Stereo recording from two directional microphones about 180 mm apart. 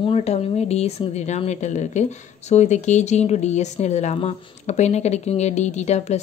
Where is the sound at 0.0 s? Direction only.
35° left (ahead or behind).